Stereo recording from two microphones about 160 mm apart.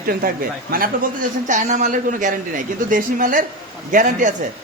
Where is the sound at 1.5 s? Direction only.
50° right (ahead or behind).